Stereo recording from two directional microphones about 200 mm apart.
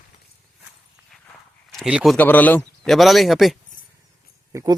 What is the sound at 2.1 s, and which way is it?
Speech, 10° left (ahead or behind).